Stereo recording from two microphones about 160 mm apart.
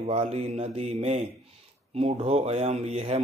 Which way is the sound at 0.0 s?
40° right (ahead or behind).